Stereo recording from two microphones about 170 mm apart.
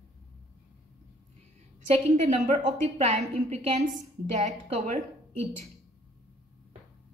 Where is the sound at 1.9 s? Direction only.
45° right (ahead or behind).